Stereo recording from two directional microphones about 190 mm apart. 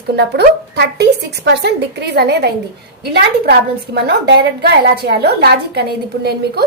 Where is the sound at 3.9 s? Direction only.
60° right (ahead or behind).